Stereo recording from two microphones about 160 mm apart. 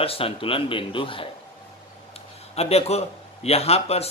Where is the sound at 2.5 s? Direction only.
40° left (ahead or behind).